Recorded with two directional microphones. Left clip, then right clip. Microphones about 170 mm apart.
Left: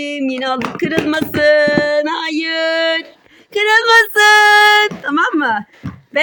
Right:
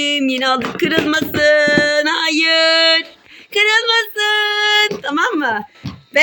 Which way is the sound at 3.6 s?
30° left (ahead or behind).